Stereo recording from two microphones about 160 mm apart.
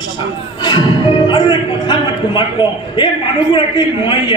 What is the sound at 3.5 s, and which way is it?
Speech, 30° left (ahead or behind).